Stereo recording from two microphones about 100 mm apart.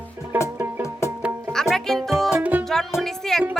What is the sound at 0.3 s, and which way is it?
Music, 20° right (ahead or behind).